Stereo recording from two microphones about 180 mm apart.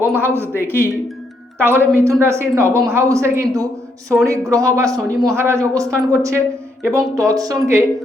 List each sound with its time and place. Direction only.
0.0 s speech: 15° right (ahead or behind)